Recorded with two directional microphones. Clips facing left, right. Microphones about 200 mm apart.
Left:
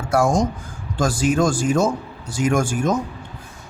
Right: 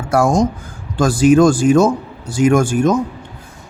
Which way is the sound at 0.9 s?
65° right (ahead or behind).